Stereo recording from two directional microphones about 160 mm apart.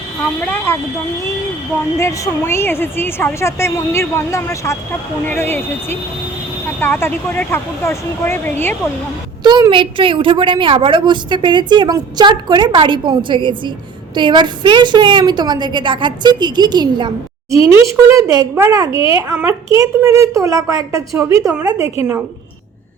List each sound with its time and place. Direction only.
0.2 s a woman's voice: 10° left (ahead or behind)
2.0 s a woman's voice: 15° left (ahead or behind)
9.4 s a woman's voice: 30° right (ahead or behind)